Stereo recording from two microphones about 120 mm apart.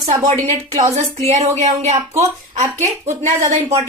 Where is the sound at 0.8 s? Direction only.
65° right (ahead or behind).